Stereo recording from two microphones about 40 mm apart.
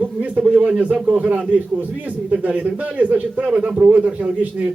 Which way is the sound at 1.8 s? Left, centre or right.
Right.